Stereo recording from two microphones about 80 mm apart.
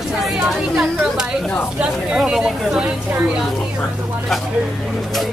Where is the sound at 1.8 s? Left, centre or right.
Centre.